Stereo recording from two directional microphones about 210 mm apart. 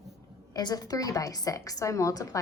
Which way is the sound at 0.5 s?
20° left (ahead or behind).